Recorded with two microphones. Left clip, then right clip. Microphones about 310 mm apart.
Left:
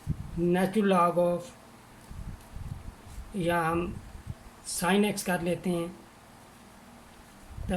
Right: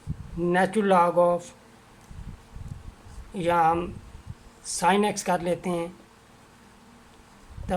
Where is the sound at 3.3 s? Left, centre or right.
Right.